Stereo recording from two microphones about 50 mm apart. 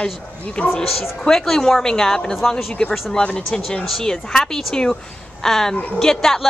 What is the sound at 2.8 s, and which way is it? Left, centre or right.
A woman's voice, left.